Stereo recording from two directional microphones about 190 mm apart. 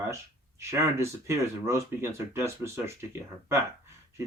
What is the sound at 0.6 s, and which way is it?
Speech, 15° right (ahead or behind).